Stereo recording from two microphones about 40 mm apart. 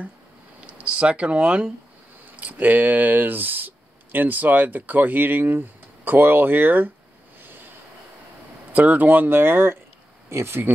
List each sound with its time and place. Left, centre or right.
0.7 s speech: right
2.3 s speech: right
8.7 s speech: right
10.4 s speech: right